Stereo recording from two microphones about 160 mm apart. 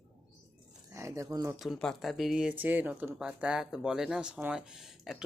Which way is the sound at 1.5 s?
Centre (ahead or behind).